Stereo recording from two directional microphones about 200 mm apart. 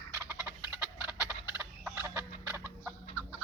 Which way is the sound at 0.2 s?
10° right (ahead or behind).